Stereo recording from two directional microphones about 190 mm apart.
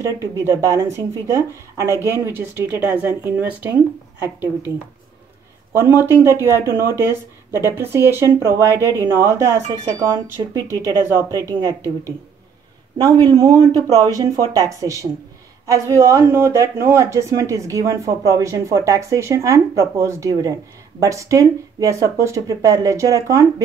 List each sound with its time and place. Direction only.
0.0 s speech: 15° right (ahead or behind)
5.7 s speech: 10° right (ahead or behind)